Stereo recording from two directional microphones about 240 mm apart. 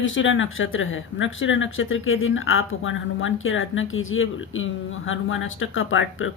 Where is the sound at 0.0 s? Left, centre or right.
Left.